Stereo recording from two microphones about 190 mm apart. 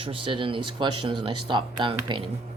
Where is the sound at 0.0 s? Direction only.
25° right (ahead or behind).